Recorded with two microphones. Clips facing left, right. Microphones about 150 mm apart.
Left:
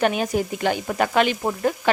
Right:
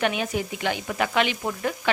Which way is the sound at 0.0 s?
40° left (ahead or behind).